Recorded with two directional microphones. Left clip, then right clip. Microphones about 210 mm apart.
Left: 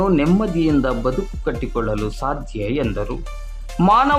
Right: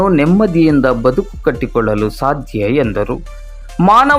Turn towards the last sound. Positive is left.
turn(degrees=-25)  # may be behind; listen again after turning